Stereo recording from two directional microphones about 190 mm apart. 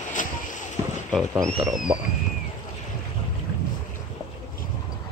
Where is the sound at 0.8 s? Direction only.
20° right (ahead or behind).